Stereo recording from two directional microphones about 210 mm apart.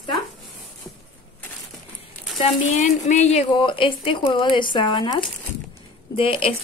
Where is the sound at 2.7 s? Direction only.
35° left (ahead or behind).